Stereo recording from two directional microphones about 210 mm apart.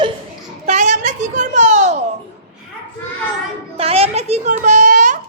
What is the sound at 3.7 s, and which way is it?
A child's voice, 30° right (ahead or behind).